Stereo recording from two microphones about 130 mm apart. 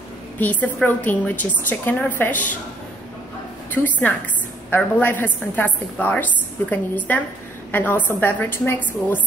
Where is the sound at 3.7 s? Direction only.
15° left (ahead or behind).